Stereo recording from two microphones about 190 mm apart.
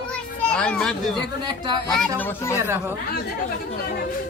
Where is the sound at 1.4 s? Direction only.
25° right (ahead or behind).